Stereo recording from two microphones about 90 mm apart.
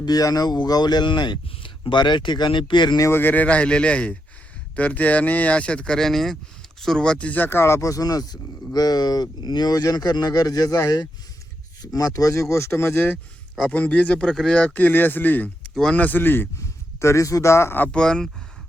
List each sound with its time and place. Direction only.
0.0 s speech: 45° left (ahead or behind)
3.0 s speech: 25° left (ahead or behind)
13.7 s speech: 15° left (ahead or behind)
15.7 s speech: 5° left (ahead or behind)
16.0 s speech: 20° left (ahead or behind)
16.6 s speech: 35° left (ahead or behind)
17.8 s speech: 10° left (ahead or behind)